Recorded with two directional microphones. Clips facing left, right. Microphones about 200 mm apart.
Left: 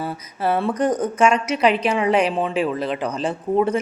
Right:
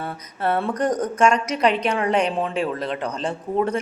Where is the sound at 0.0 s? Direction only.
5° left (ahead or behind).